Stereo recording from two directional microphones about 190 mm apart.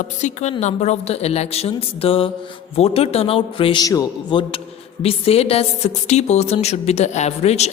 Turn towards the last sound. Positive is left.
turn(degrees=35)  # may be behind; listen again after turning